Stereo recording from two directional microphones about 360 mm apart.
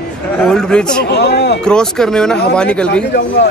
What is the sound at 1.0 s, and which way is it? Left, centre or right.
Speech, left.